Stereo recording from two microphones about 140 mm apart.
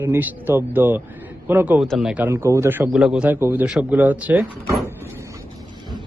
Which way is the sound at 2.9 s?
5° right (ahead or behind).